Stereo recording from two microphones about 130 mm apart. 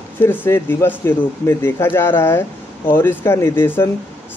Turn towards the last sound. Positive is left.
turn(degrees=15)  # may be behind; listen again after turning